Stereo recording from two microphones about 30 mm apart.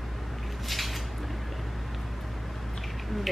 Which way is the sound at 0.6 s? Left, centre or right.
Centre.